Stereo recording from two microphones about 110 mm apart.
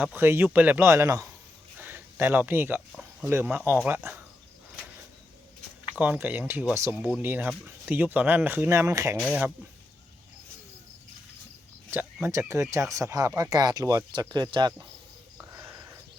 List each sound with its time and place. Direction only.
0.0 s speech: 20° right (ahead or behind)
6.0 s speech: 15° right (ahead or behind)
11.9 s speech: 20° right (ahead or behind); by 14.8 s 40° right (ahead or behind)
15.5 s a sound: 20° right (ahead or behind)